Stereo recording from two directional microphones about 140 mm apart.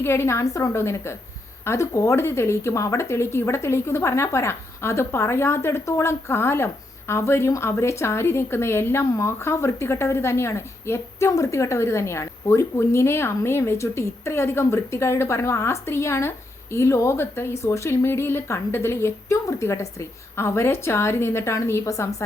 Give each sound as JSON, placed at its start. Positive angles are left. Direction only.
{"t": 0.0, "sound": "a woman's voice", "side_deg": 20}